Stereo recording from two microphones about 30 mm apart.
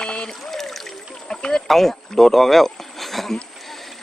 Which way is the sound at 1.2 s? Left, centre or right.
Left.